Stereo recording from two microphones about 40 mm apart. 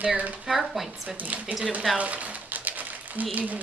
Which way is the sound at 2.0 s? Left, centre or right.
Right.